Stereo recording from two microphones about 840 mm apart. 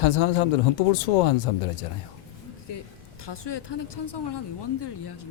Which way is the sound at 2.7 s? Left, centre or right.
Left.